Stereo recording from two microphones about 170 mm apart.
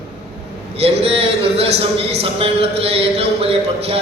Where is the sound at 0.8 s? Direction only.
35° right (ahead or behind).